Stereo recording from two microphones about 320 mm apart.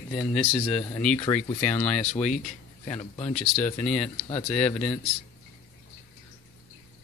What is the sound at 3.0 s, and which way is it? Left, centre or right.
Speech, centre.